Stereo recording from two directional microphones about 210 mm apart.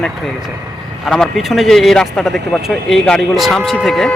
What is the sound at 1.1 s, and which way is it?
Speech, centre (ahead or behind).